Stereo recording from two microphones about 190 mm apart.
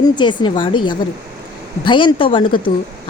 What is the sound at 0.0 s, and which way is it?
A woman's voice, 25° left (ahead or behind).